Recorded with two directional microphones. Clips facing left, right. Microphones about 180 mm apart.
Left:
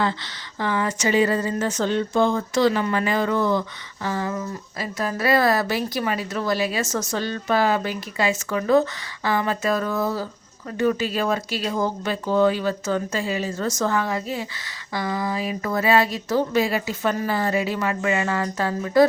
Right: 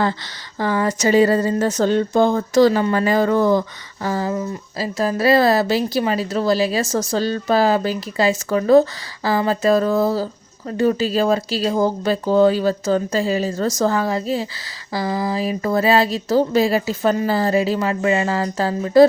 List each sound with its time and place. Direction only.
0.6 s speech: 40° right (ahead or behind)